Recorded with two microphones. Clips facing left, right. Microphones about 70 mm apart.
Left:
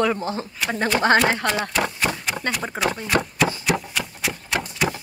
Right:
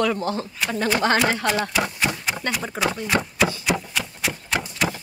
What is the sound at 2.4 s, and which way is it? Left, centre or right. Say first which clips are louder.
Speech: left 1 dB; left.